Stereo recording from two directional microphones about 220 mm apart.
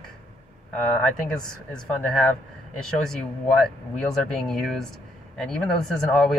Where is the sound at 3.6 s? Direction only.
Centre (ahead or behind).